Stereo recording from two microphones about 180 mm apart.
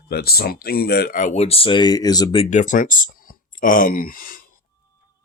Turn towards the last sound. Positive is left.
turn(degrees=50)  # may be behind; listen again after turning